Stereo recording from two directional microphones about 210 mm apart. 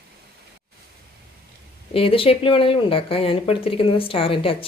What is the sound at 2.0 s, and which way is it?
Speech, 25° left (ahead or behind).